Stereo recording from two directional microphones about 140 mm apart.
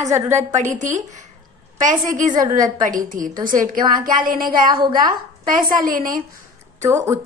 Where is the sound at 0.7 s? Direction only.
60° right (ahead or behind).